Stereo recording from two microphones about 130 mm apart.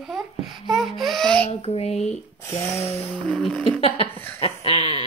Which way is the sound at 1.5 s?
50° left (ahead or behind).